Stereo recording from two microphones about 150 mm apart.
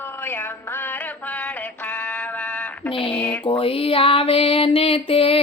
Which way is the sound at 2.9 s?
35° left (ahead or behind).